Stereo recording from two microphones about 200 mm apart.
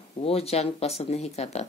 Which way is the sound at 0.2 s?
30° left (ahead or behind).